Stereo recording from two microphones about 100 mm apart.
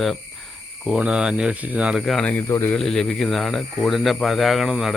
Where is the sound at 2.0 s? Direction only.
5° left (ahead or behind).